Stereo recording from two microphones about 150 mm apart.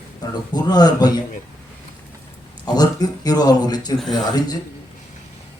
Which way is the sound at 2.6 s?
25° left (ahead or behind).